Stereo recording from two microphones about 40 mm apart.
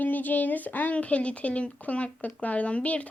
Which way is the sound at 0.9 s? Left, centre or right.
Left.